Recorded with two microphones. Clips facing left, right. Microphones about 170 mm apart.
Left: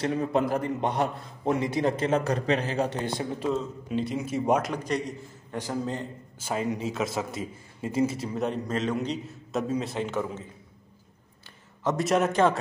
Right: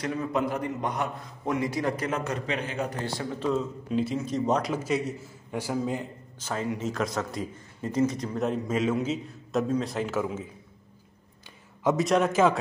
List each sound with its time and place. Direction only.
0.0 s a man's voice: 30° left (ahead or behind)
3.0 s speech: 20° left (ahead or behind)
3.9 s a man's voice: centre (ahead or behind)
4.2 s a man's voice: 10° left (ahead or behind); by 6.0 s 10° right (ahead or behind)
6.4 s speech: 15° left (ahead or behind)
6.9 s a man's voice: 5° left (ahead or behind)
12.0 s a man's voice: centre (ahead or behind)